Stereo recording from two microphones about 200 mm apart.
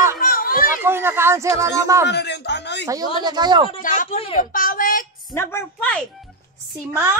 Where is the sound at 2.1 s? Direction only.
55° left (ahead or behind).